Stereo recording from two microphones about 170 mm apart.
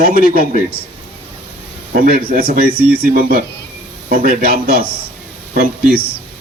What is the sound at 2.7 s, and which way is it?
Speech, 10° right (ahead or behind).